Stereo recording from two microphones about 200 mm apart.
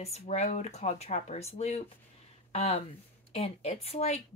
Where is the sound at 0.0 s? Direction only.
30° left (ahead or behind).